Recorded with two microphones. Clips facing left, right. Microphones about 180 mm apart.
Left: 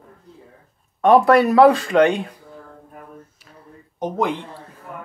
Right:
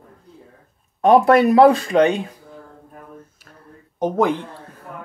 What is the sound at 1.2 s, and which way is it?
Speech, 25° right (ahead or behind).